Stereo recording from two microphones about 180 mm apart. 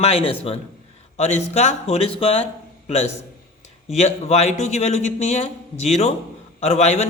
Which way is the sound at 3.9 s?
40° left (ahead or behind).